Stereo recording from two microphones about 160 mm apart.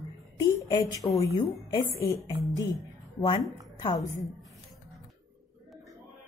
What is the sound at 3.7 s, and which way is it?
Speech, 25° left (ahead or behind).